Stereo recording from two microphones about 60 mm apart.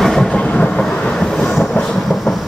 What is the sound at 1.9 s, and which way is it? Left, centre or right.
Thunder, centre.